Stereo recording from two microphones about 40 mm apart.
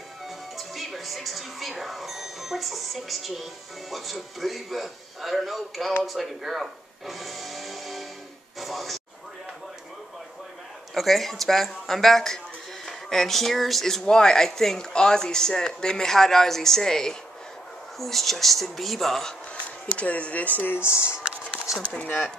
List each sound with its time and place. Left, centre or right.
0.6 s speech: centre
8.5 s a sound: centre
11.0 s speech: centre
20.0 s speech: left
20.7 s speech: left